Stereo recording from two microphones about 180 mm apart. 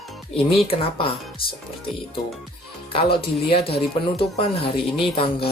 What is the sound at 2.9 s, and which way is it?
Speech, 30° left (ahead or behind).